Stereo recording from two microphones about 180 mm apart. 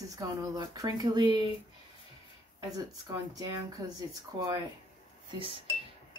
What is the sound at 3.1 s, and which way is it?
Speech, 20° right (ahead or behind).